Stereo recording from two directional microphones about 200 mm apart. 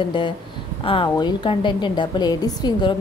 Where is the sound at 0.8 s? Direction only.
25° left (ahead or behind).